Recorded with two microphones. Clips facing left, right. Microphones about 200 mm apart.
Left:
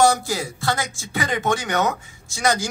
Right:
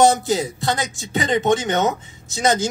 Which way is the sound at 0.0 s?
20° right (ahead or behind).